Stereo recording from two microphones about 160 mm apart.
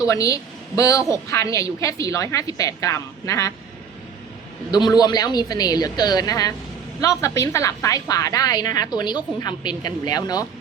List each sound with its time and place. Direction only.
0.0 s a woman's voice: 20° left (ahead or behind)
4.7 s a woman's voice: 25° left (ahead or behind)